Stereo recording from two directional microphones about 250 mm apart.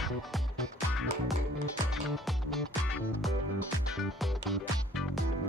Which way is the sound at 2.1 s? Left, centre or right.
Centre.